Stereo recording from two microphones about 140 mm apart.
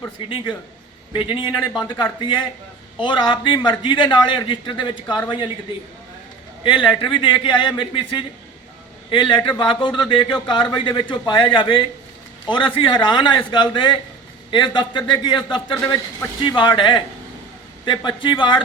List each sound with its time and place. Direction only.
0.2 s a man's voice: 35° left (ahead or behind)
6.7 s a man's voice: 35° left (ahead or behind)
18.0 s a man's voice: 35° left (ahead or behind)